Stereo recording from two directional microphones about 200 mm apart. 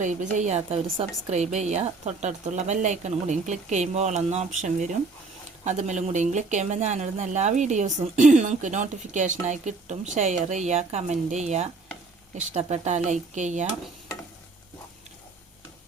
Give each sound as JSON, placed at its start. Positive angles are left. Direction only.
{"t": 0.0, "sound": "speech", "side_deg": -40}